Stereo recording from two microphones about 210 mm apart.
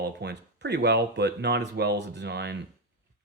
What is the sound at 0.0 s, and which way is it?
Speech, 50° right (ahead or behind).